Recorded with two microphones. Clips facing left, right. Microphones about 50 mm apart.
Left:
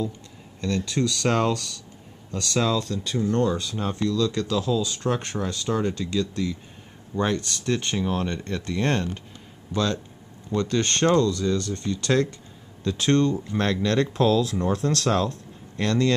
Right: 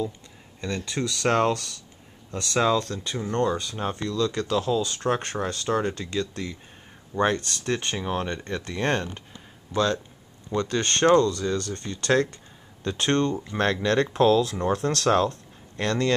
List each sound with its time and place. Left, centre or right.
0.6 s speech: right
10.5 s speech: centre